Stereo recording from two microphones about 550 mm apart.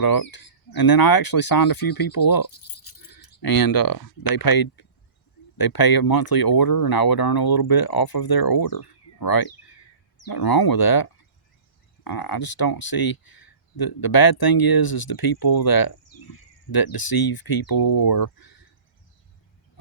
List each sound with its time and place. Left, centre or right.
0.0 s speech: left